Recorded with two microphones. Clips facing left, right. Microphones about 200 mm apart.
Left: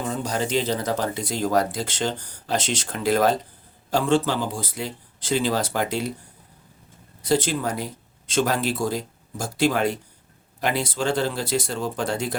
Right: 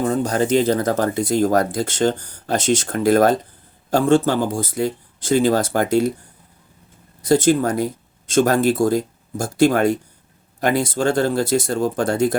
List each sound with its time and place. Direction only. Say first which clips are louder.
0.0 s speech: right 7 dB; 50° right (ahead or behind)
7.2 s speech: right 7 dB; 45° right (ahead or behind)